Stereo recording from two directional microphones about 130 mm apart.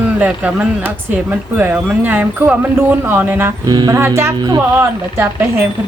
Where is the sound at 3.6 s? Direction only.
30° right (ahead or behind).